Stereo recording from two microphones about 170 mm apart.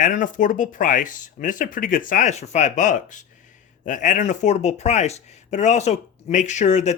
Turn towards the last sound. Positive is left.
turn(degrees=40)  # may be behind; listen again after turning